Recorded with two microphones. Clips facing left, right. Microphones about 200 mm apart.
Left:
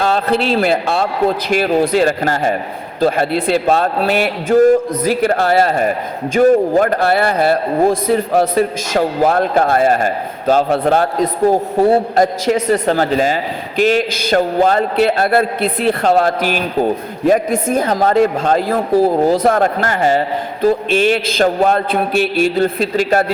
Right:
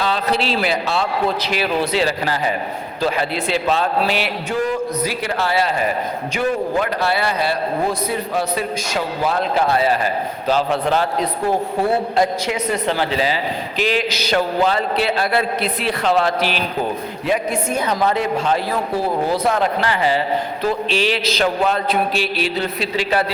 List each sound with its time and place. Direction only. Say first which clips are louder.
0.0 s a man's voice: left 5 dB; 50° left (ahead or behind)